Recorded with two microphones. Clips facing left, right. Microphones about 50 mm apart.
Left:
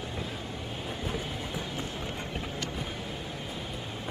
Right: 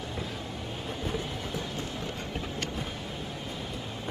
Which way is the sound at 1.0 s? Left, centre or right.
Centre.